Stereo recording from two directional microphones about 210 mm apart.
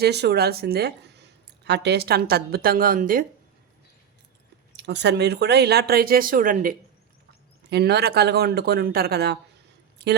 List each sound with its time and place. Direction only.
0.0 s speech: 50° right (ahead or behind)
4.8 s speech: 55° right (ahead or behind)
7.7 s speech: 50° right (ahead or behind)